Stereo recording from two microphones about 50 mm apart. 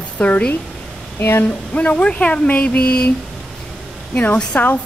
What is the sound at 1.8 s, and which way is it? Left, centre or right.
Speech, left.